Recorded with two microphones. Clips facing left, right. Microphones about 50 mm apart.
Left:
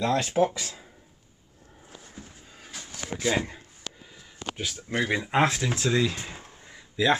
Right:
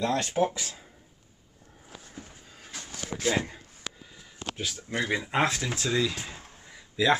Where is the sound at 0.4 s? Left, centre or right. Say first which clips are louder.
Left 3 dB; centre.